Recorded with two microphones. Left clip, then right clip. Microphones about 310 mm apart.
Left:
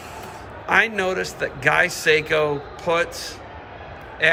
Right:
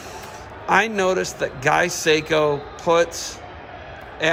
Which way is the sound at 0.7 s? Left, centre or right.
Centre.